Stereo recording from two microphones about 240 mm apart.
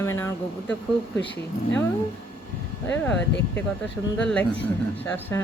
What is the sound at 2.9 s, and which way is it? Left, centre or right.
Speech, centre.